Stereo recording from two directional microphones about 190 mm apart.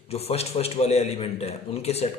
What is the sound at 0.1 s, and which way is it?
A man's voice, 30° left (ahead or behind).